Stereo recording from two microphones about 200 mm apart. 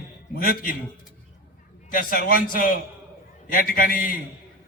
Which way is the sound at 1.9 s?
45° left (ahead or behind).